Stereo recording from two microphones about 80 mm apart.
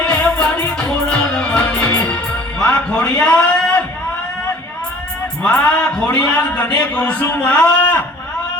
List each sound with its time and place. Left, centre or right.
0.0 s music: centre
5.4 s a man's voice: centre